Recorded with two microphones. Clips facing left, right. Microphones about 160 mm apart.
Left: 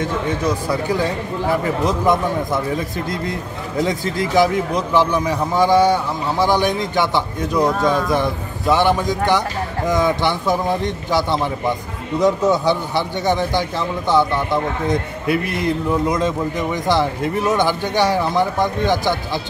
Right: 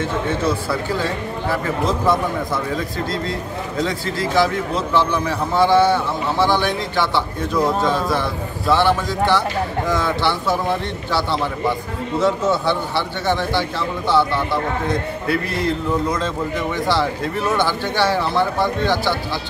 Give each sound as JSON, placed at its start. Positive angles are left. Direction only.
{"t": 0.0, "sound": "a man's voice", "side_deg": 15}
{"t": 3.7, "sound": "a man's voice", "side_deg": 20}